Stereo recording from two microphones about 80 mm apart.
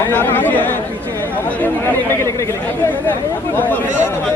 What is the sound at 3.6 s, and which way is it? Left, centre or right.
Speech, left.